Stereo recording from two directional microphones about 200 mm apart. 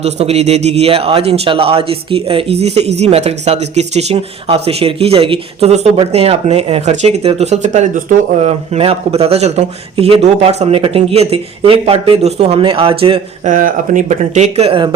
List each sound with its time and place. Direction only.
0.0 s a man's voice: 30° right (ahead or behind)
13.5 s speech: 40° right (ahead or behind)